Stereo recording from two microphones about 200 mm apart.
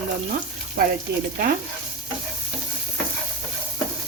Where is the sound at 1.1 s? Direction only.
50° right (ahead or behind).